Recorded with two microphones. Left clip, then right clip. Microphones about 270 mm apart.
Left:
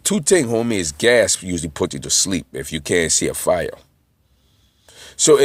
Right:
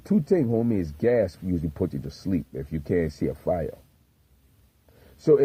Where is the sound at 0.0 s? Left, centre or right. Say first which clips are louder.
Left 7 dB; centre.